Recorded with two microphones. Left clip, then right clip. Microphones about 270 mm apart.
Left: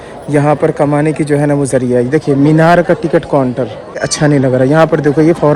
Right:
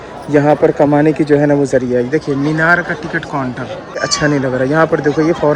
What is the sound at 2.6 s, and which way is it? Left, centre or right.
Speech, left.